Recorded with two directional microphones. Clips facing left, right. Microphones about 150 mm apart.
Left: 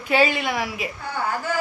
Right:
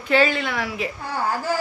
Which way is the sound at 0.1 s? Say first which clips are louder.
Right 1 dB; 15° left (ahead or behind).